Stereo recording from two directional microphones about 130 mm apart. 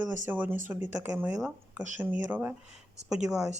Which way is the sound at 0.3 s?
15° right (ahead or behind).